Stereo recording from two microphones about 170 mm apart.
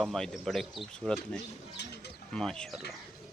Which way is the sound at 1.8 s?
85° left.